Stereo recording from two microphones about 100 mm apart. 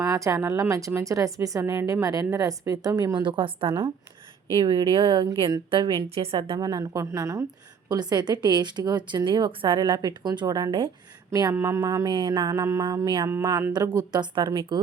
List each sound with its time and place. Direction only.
0.0 s speech: 35° right (ahead or behind); by 6.1 s 55° right (ahead or behind)
6.1 s a woman's voice: 80° right
6.3 s speech: 50° right (ahead or behind); by 7.4 s 30° right (ahead or behind)
7.9 s speech: 45° right (ahead or behind)
11.3 s a sound: 40° right (ahead or behind)
11.5 s speech: 25° right (ahead or behind); by 14.6 s 50° right (ahead or behind)